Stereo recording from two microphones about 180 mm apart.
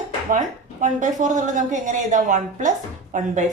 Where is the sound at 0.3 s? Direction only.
45° right (ahead or behind).